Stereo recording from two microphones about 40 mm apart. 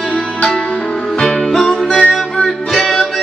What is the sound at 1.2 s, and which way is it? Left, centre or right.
Music, centre.